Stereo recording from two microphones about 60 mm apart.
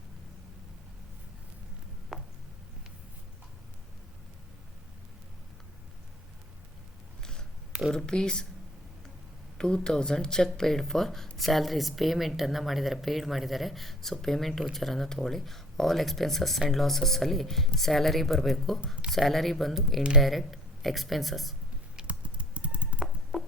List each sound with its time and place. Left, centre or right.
7.2 s a sound: centre
7.7 s a sound: centre
7.9 s speech: centre
9.6 s a woman's voice: centre
20.0 s speech: centre
20.2 s speech: centre
21.9 s computer keyboard: right
23.3 s music: centre